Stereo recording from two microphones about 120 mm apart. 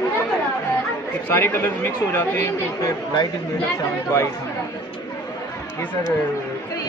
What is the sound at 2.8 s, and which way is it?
Speech, 30° left (ahead or behind).